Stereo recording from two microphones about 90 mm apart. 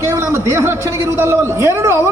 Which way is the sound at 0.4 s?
30° right (ahead or behind).